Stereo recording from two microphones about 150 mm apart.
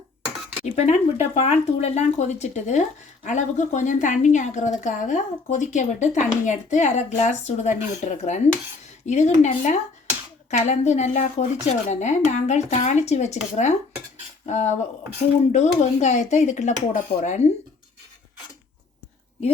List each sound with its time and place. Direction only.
0.6 s a woman's voice: 45° left (ahead or behind)